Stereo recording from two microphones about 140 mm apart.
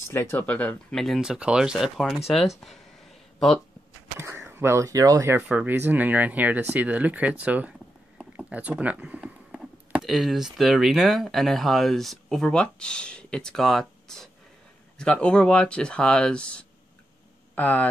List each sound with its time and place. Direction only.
0.1 s speech: 15° left (ahead or behind); by 2.2 s centre (ahead or behind)
3.3 s speech: 5° left (ahead or behind)
4.2 s speech: 20° right (ahead or behind); by 17.8 s 10° left (ahead or behind)